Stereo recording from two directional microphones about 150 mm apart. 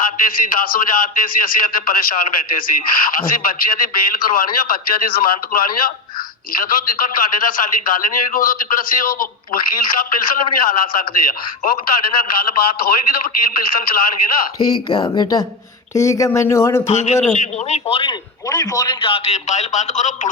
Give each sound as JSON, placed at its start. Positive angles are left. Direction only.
{"t": 0.5, "sound": "a man's voice", "side_deg": 70}
{"t": 12.3, "sound": "a man's voice", "side_deg": 85}
{"t": 14.7, "sound": "speech", "side_deg": 35}
{"t": 16.8, "sound": "a man's voice", "side_deg": 45}
{"t": 18.4, "sound": "a man's voice", "side_deg": 25}